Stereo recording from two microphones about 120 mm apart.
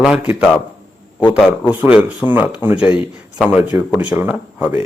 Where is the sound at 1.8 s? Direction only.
10° right (ahead or behind).